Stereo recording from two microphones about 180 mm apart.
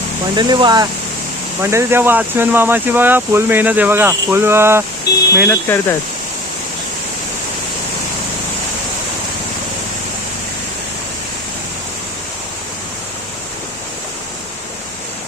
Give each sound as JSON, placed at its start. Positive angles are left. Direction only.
{"t": 0.3, "sound": "speech", "side_deg": -25}
{"t": 5.5, "sound": "speech", "side_deg": 15}